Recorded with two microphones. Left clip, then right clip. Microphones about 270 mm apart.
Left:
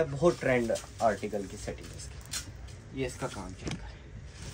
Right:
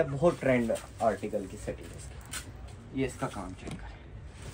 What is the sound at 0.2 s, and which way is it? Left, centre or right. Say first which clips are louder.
Speech: even; centre.